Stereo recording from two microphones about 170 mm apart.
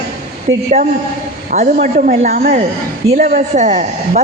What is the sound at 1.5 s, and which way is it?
A man's voice, 45° right (ahead or behind).